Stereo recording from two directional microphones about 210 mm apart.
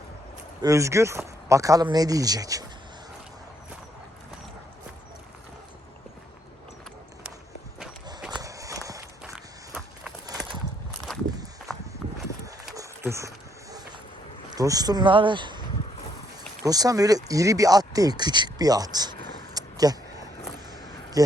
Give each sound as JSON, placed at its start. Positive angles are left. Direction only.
{"t": 0.6, "sound": "speech", "side_deg": -15}
{"t": 8.3, "sound": "walk", "side_deg": -15}
{"t": 11.1, "sound": "walk", "side_deg": 0}
{"t": 12.7, "sound": "a sound", "side_deg": -15}
{"t": 14.5, "sound": "speech", "side_deg": -15}
{"t": 16.6, "sound": "speech", "side_deg": -15}
{"t": 19.5, "sound": "a sound", "side_deg": -20}
{"t": 21.2, "sound": "speech", "side_deg": -15}